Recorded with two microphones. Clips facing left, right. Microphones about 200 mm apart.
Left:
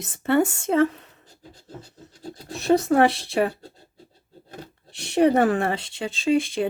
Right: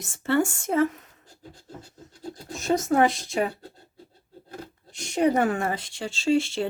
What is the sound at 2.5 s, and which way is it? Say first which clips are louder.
Speech: left 4 dB; 65° left (ahead or behind).